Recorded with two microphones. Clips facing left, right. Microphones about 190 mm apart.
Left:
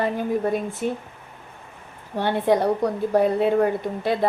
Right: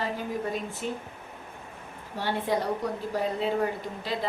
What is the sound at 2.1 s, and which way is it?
A woman's voice, 60° left (ahead or behind).